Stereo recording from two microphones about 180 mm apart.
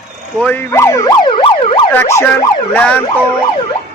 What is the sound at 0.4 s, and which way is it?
Speech, 15° left (ahead or behind).